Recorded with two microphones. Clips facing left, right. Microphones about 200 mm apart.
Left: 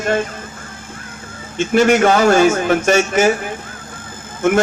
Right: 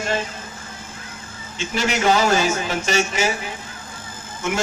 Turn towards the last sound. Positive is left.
turn(degrees=50)  # may be behind; listen again after turning